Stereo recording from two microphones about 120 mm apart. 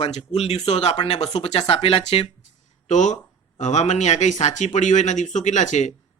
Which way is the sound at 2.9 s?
90° left.